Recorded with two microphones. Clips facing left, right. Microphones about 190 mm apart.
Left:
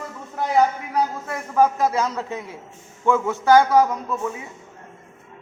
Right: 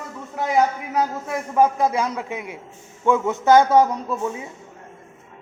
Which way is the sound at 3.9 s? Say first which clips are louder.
Right 1 dB; 30° right (ahead or behind).